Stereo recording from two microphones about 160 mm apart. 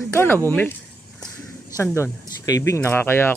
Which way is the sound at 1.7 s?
15° left (ahead or behind).